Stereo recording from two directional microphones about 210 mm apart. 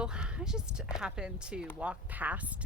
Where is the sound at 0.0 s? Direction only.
5° right (ahead or behind).